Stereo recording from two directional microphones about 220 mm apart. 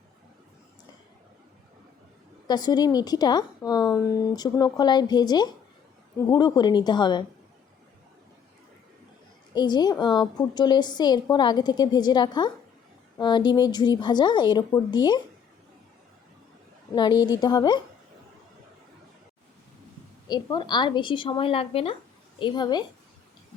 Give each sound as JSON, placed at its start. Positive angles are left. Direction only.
{"t": 2.5, "sound": "a woman's voice", "side_deg": 20}
{"t": 9.6, "sound": "a woman's voice", "side_deg": 20}
{"t": 16.9, "sound": "a woman's voice", "side_deg": 20}
{"t": 20.2, "sound": "a woman's voice", "side_deg": 20}